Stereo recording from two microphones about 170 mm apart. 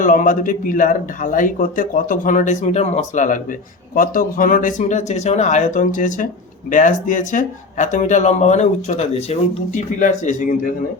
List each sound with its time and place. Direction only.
0.0 s speech: 50° left (ahead or behind)